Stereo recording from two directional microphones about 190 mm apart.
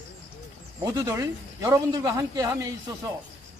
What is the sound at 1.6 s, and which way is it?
A man's voice, 15° right (ahead or behind).